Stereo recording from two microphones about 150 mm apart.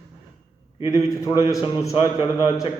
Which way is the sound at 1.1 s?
20° left (ahead or behind).